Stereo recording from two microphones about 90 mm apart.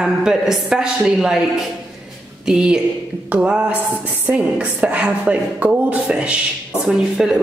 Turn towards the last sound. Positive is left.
turn(degrees=-5)  # may be behind; listen again after turning